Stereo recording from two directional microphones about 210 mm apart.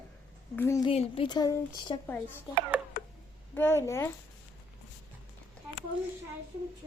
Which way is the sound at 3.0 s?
40° left (ahead or behind).